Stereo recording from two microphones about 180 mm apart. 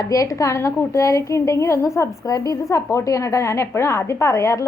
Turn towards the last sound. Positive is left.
turn(degrees=15)  # may be behind; listen again after turning